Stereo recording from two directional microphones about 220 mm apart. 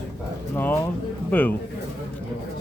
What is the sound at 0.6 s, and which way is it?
Speech, 10° left (ahead or behind).